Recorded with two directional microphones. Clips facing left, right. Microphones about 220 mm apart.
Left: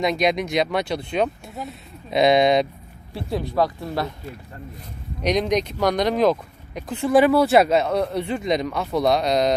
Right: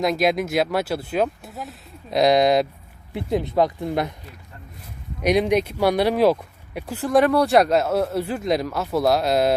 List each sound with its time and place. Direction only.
0.0 s speech: 5° right (ahead or behind)
3.1 s speech: 20° right (ahead or behind)
5.2 s speech: 10° right (ahead or behind)